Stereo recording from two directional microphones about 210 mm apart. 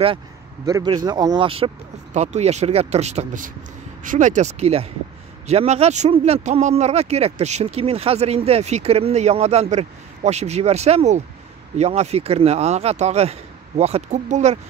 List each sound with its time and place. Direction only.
0.7 s speech: 20° right (ahead or behind); by 14.6 s 35° right (ahead or behind)